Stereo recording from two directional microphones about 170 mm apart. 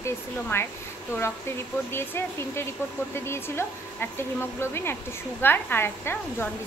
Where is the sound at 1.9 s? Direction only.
15° left (ahead or behind).